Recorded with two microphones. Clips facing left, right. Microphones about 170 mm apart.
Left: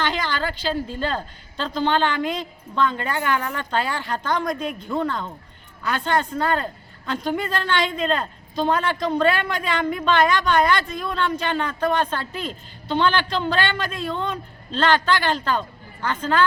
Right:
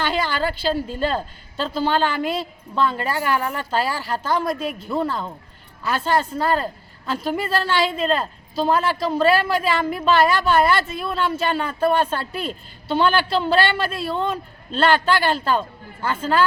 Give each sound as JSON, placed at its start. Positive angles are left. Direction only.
{"t": 0.0, "sound": "a sound", "side_deg": -10}
{"t": 0.7, "sound": "speech", "side_deg": -40}
{"t": 1.1, "sound": "a woman's voice", "side_deg": -10}